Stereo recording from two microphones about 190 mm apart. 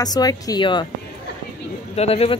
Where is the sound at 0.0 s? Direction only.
20° left (ahead or behind).